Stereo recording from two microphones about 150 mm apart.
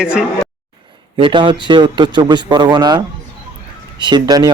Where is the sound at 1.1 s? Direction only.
35° right (ahead or behind).